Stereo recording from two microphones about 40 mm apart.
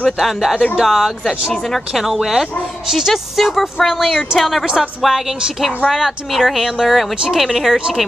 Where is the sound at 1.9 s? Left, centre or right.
Centre.